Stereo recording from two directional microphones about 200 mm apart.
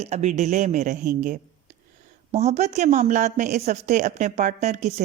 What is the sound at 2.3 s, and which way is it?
A woman's voice, 30° right (ahead or behind).